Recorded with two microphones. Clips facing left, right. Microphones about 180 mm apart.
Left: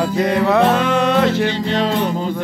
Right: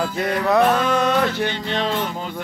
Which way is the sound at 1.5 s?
35° left (ahead or behind).